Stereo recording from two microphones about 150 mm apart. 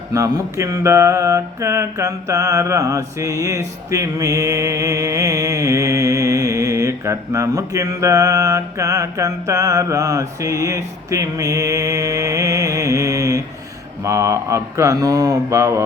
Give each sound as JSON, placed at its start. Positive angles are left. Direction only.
{"t": 0.1, "sound": "mantra", "side_deg": -20}